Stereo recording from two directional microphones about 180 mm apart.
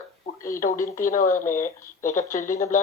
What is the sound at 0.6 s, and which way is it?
Speech, 50° left (ahead or behind).